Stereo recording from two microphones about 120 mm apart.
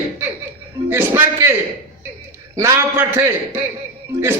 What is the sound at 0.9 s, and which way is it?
Speech, 20° right (ahead or behind).